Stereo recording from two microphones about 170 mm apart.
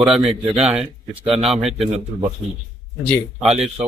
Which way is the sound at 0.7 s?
Centre (ahead or behind).